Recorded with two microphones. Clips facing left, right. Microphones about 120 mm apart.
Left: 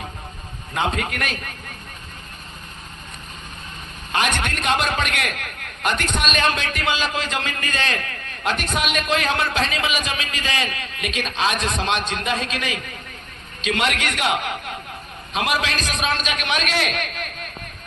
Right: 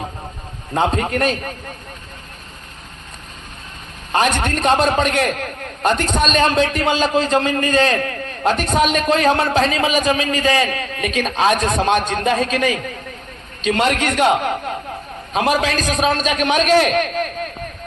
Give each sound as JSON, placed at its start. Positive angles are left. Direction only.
{"t": 0.7, "sound": "a man's voice", "side_deg": -35}
{"t": 4.1, "sound": "a man's voice", "side_deg": -35}